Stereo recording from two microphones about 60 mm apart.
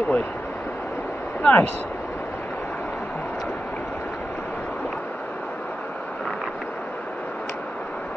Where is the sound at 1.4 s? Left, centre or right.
Left.